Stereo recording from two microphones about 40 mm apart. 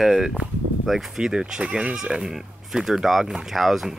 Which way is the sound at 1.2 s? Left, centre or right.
Centre.